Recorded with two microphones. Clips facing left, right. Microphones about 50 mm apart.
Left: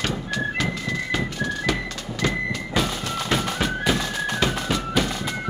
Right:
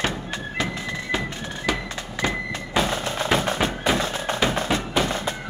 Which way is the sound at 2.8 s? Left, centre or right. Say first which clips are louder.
Right 2 dB; right.